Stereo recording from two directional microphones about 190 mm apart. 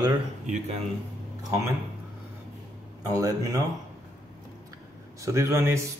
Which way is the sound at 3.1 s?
20° right (ahead or behind).